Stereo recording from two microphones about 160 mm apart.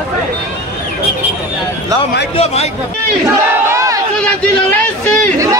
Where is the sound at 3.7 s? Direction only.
20° right (ahead or behind).